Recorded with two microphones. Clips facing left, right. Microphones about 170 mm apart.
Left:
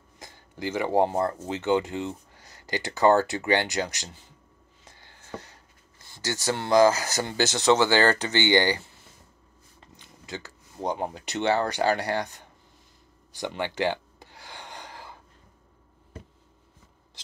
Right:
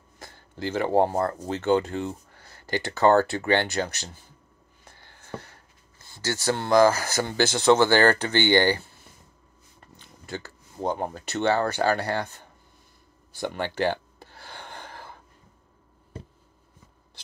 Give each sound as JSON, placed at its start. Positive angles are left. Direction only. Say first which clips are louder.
{"t": 0.2, "sound": "speech", "louder": "right 1 dB", "side_deg": 15}
{"t": 4.8, "sound": "a sound", "louder": "right 1 dB", "side_deg": 20}
{"t": 6.1, "sound": "speech", "louder": "right 2 dB", "side_deg": 15}
{"t": 9.9, "sound": "a sound", "louder": "right 2 dB", "side_deg": 15}
{"t": 11.4, "sound": "speech", "louder": "right 1 dB", "side_deg": 15}
{"t": 13.6, "sound": "gasp", "louder": "right 1 dB", "side_deg": 15}